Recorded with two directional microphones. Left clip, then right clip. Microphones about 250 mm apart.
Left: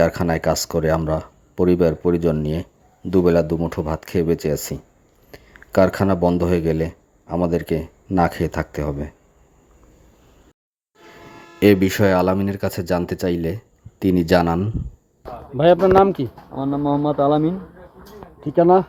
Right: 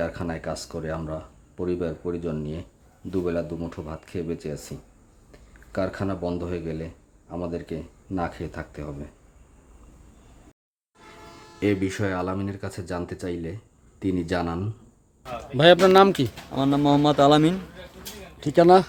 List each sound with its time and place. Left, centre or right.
0.0 s speech: left
11.6 s speech: left
15.5 s speech: centre
16.6 s speech: right